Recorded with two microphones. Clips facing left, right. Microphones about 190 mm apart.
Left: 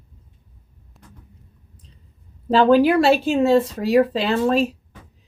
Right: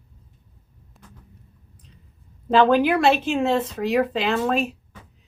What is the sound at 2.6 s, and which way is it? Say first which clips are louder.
Speech: left 6 dB; 40° left (ahead or behind).